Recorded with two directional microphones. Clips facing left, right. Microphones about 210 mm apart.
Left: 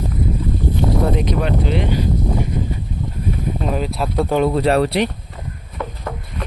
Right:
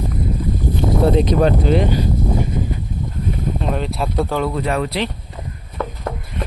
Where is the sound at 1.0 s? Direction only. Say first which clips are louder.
Right 5 dB; 30° right (ahead or behind).